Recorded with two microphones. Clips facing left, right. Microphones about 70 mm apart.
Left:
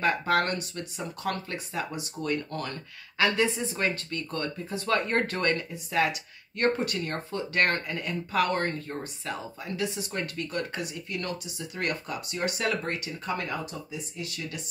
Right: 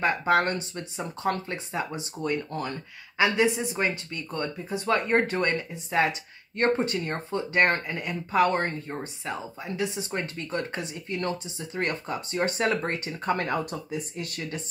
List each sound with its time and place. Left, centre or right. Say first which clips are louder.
0.0 s speech: right 2 dB; right